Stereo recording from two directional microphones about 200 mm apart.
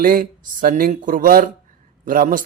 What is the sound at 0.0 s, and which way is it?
A man's voice, 45° right (ahead or behind).